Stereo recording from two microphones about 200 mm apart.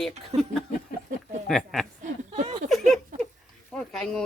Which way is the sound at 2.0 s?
35° right (ahead or behind).